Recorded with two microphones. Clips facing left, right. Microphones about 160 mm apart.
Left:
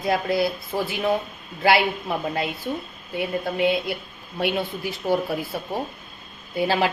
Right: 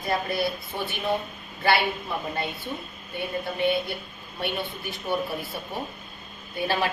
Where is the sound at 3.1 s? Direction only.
90° left.